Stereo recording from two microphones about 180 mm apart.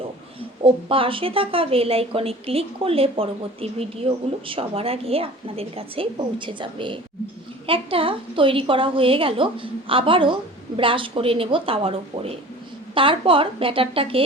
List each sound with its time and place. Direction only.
0.6 s a woman's voice: 30° right (ahead or behind)